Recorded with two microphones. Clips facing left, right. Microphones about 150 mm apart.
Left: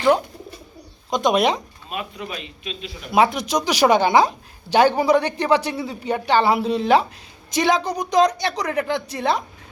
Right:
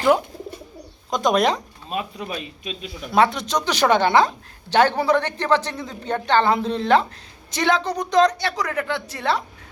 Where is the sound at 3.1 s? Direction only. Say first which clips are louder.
Left 1 dB; 10° left (ahead or behind).